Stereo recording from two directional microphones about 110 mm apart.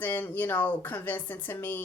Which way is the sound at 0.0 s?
20° left (ahead or behind).